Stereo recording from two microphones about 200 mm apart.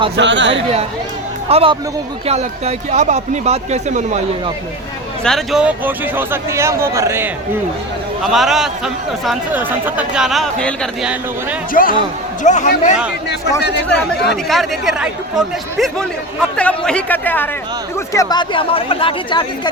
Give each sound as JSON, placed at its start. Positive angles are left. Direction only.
{"t": 0.2, "sound": "speech", "side_deg": -65}
{"t": 1.5, "sound": "speech", "side_deg": -30}
{"t": 5.2, "sound": "speech", "side_deg": 0}
{"t": 8.2, "sound": "speech", "side_deg": 0}
{"t": 11.7, "sound": "a man's voice", "side_deg": 45}
{"t": 13.8, "sound": "speech", "side_deg": 5}